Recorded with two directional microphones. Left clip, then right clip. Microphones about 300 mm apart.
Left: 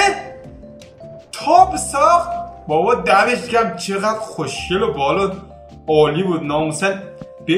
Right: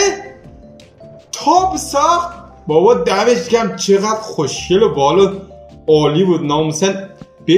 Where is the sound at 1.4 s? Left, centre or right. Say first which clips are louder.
Left 1 dB; centre.